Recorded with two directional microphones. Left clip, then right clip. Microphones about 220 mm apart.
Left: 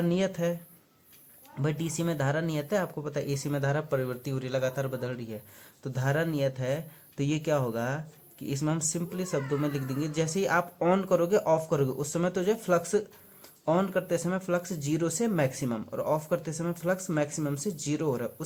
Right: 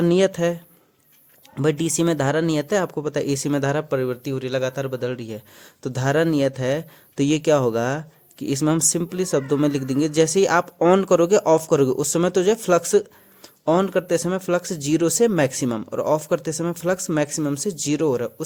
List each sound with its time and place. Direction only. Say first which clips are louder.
0.0 s speech: right 10 dB; 50° right (ahead or behind)
1.5 s speech: right 12 dB; 50° right (ahead or behind)